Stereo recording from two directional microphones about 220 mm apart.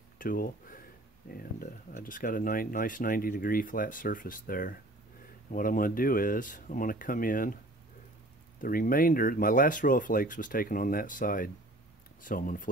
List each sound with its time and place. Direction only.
0.2 s speech: 40° left (ahead or behind)
8.5 s speech: 40° left (ahead or behind)